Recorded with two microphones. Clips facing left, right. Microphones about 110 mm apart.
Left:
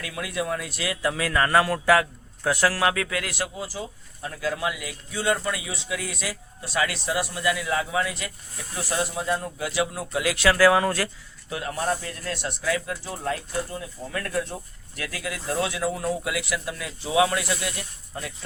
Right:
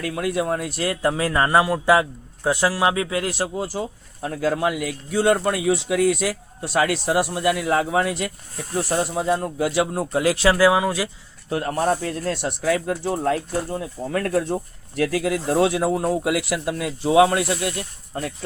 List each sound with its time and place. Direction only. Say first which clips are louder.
0.0 s speech: right 6 dB; 45° right (ahead or behind)
8.7 s speech: right 6 dB; 40° right (ahead or behind); by 10.8 s 25° right (ahead or behind)
10.8 s speech: right 2 dB; 10° right (ahead or behind)
11.4 s speech: right 6 dB; 40° right (ahead or behind)
15.5 s speech: right 6 dB; 35° right (ahead or behind); by 16.9 s 50° right (ahead or behind)
17.0 s speech: right 6 dB; 40° right (ahead or behind)